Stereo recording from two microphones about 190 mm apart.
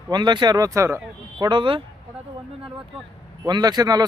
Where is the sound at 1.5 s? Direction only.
25° right (ahead or behind).